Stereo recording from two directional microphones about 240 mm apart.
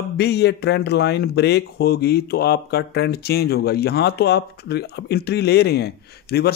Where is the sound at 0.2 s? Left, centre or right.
Left.